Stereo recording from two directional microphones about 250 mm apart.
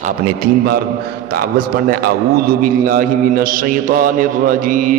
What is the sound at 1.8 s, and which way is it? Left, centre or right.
A man's voice, right.